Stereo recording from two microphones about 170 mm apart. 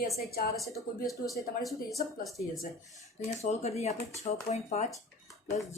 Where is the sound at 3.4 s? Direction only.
40° left (ahead or behind).